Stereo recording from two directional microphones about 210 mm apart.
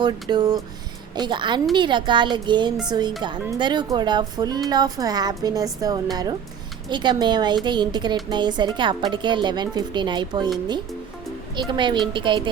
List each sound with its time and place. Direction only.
0.0 s a woman's voice: 20° right (ahead or behind)
11.5 s a woman's voice: 20° right (ahead or behind)